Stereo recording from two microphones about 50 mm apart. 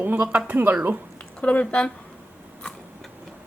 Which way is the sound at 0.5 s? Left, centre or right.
Right.